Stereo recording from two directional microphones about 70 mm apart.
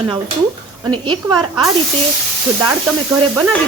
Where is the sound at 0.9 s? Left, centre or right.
Right.